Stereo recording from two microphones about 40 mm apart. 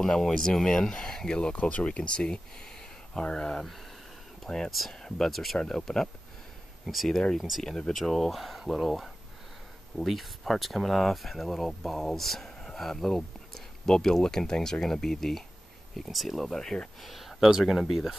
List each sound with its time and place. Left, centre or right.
0.0 s speech: centre
1.3 s speech: left
4.6 s speech: centre
5.0 s speech: centre
7.1 s speech: centre
7.3 s speech: centre
7.6 s speech: centre
7.9 s speech: centre
16.5 s speech: centre
17.0 s a sound: centre
17.5 s speech: centre